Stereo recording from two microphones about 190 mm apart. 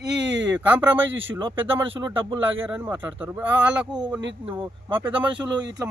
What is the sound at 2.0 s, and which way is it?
Speech, 25° right (ahead or behind).